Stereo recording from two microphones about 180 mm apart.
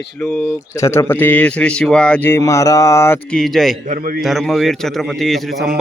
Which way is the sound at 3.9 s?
50° right (ahead or behind).